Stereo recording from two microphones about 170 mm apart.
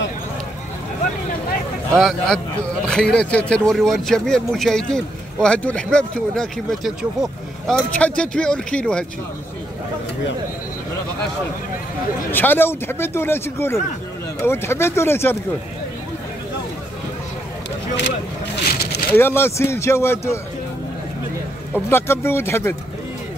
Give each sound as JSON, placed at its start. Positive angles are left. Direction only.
{"t": 2.0, "sound": "a man's voice", "side_deg": 5}
{"t": 12.3, "sound": "speech", "side_deg": 10}
{"t": 18.7, "sound": "a sound", "side_deg": 65}
{"t": 19.1, "sound": "speech", "side_deg": 15}
{"t": 21.8, "sound": "speech", "side_deg": 15}